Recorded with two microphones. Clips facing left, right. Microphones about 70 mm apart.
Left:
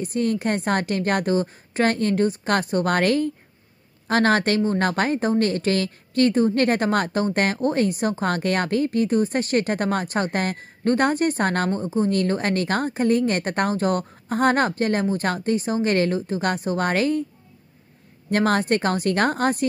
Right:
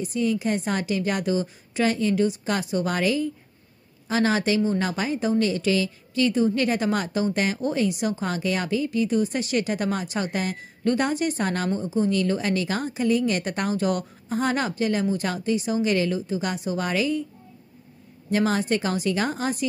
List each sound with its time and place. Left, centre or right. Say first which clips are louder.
0.0 s a woman's voice: left 1 dB; left
18.3 s a woman's voice: left 3 dB; left